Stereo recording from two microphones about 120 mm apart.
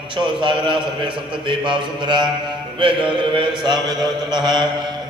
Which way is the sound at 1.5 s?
40° right (ahead or behind).